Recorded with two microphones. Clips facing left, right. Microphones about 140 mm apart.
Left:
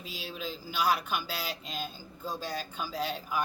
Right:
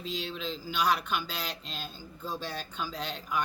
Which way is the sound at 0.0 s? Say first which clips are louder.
Right 3 dB; 10° left (ahead or behind).